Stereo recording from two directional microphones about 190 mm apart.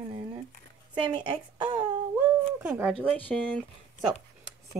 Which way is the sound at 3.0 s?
5° left (ahead or behind).